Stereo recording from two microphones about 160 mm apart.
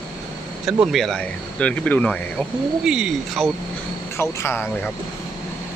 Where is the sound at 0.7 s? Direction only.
Centre (ahead or behind).